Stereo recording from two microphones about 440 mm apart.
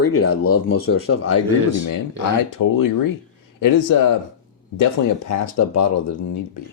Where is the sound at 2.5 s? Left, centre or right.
Left.